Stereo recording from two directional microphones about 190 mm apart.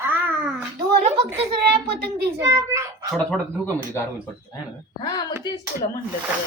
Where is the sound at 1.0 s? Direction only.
30° right (ahead or behind).